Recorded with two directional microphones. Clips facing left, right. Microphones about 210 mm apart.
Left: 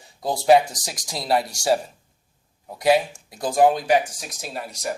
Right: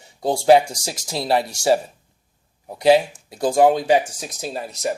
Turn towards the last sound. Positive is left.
turn(degrees=-25)  # may be behind; listen again after turning